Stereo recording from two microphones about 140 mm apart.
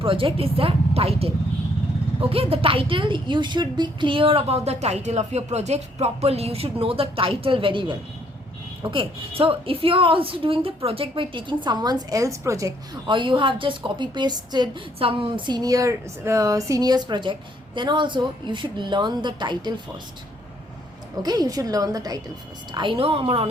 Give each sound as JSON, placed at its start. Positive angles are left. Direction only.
{"t": 0.0, "sound": "a woman's voice", "side_deg": -40}
{"t": 2.3, "sound": "a woman's voice", "side_deg": -40}
{"t": 13.1, "sound": "a woman's voice", "side_deg": -35}
{"t": 21.2, "sound": "a woman's voice", "side_deg": -30}